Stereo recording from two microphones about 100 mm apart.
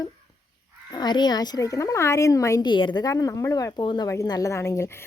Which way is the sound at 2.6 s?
50° left (ahead or behind).